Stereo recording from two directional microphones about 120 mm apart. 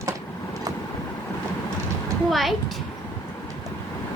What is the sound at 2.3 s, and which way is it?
Speech, centre (ahead or behind).